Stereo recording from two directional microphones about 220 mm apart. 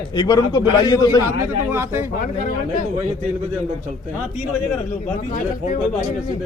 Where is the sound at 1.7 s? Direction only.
10° right (ahead or behind).